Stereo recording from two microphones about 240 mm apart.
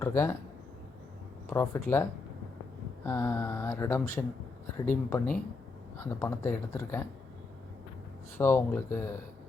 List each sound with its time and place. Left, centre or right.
0.0 s speech: centre
1.5 s speech: centre
8.4 s speech: centre